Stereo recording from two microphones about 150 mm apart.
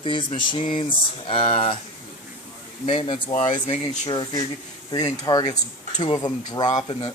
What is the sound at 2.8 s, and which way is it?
Speech, 35° left (ahead or behind).